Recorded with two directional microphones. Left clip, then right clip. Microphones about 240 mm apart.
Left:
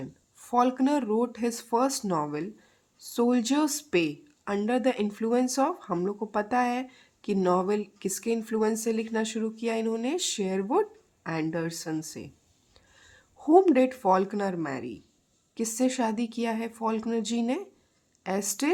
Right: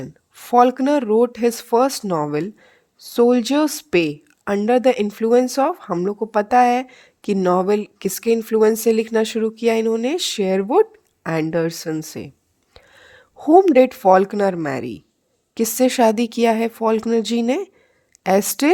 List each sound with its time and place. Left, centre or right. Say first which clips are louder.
0.0 s speech: right 8 dB; right